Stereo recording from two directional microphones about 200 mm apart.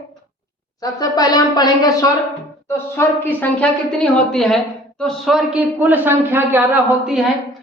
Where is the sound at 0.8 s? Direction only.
20° left (ahead or behind).